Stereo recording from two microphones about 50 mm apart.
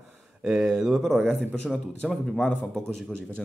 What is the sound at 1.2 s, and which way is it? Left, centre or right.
Speech, centre.